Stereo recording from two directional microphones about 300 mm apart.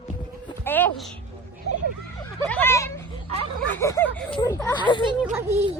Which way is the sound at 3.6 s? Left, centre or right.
Centre.